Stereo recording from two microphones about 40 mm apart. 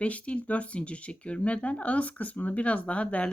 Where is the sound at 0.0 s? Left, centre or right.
Left.